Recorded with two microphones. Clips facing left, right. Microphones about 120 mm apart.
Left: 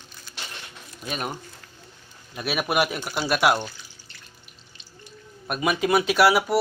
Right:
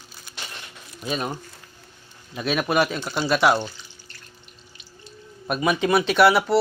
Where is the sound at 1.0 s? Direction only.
Centre (ahead or behind).